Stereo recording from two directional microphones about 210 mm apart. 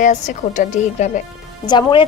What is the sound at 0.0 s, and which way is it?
A woman's voice, 35° left (ahead or behind).